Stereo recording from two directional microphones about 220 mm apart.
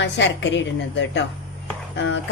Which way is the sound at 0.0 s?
55° left (ahead or behind).